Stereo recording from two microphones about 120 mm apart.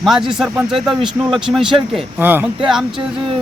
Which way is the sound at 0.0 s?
5° right (ahead or behind).